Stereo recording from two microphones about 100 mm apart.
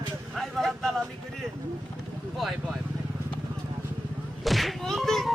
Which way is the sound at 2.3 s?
5° right (ahead or behind).